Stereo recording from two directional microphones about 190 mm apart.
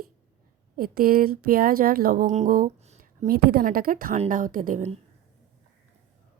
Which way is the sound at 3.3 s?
55° right (ahead or behind).